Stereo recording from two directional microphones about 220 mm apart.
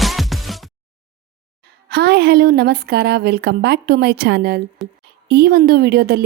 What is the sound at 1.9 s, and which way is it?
A woman's voice, 50° right (ahead or behind).